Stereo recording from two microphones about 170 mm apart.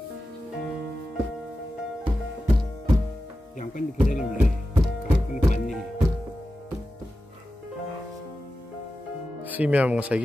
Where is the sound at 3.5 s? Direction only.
50° left (ahead or behind).